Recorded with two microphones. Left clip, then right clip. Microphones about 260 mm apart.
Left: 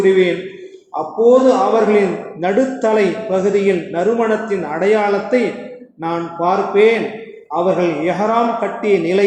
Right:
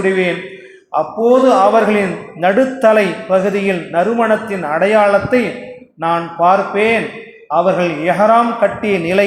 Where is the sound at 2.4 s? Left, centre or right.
Right.